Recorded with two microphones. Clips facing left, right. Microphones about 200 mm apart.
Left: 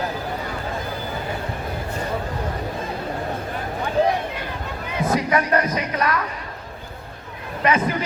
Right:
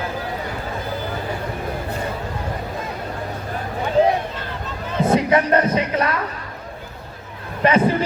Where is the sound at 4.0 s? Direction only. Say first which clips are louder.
Right 3 dB; 20° right (ahead or behind).